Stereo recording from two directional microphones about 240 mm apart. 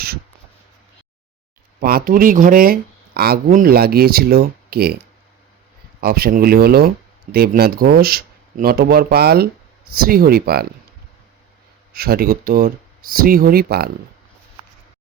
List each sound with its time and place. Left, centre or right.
1.8 s speech: right
6.0 s speech: right
11.9 s speech: right